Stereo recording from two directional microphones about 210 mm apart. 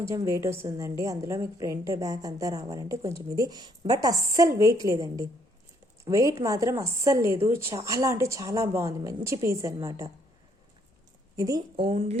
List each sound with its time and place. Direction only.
0.1 s a woman's voice: 15° right (ahead or behind)
11.3 s speech: 15° right (ahead or behind)